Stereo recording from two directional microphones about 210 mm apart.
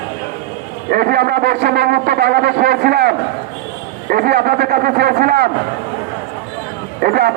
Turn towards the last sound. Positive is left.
turn(degrees=-45)  # may be behind; listen again after turning